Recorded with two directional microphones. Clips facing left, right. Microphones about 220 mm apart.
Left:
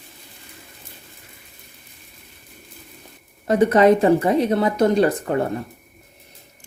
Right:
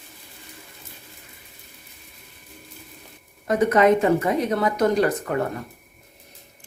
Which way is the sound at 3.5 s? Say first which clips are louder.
Left 3 dB; 30° left (ahead or behind).